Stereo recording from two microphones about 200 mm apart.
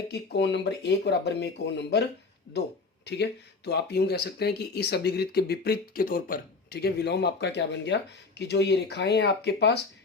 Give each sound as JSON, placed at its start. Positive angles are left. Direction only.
{"t": 0.1, "sound": "speech", "side_deg": 60}
{"t": 3.1, "sound": "speech", "side_deg": 60}